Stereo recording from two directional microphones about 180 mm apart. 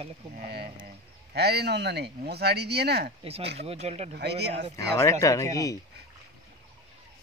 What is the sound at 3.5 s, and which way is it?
Speech, 35° right (ahead or behind).